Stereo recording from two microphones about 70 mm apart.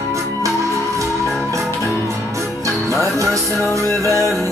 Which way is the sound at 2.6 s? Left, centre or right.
Right.